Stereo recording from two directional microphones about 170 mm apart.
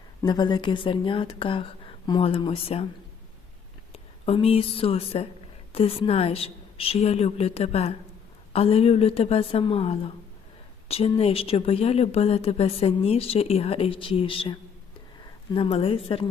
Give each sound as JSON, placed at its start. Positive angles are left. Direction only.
{"t": 0.2, "sound": "speech", "side_deg": 25}
{"t": 3.9, "sound": "speech", "side_deg": 35}
{"t": 15.5, "sound": "speech", "side_deg": 35}